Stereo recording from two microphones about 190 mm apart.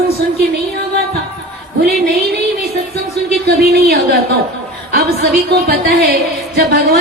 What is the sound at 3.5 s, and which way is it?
Music, 55° right (ahead or behind).